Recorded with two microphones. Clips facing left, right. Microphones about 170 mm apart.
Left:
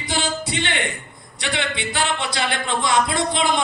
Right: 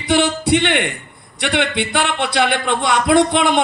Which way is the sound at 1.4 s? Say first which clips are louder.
Right 6 dB; 60° right (ahead or behind).